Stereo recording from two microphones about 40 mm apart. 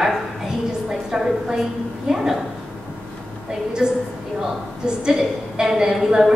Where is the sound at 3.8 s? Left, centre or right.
Centre.